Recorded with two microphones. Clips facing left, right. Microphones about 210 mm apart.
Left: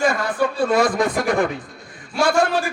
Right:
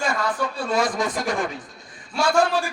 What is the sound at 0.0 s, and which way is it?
Speech, 55° left (ahead or behind).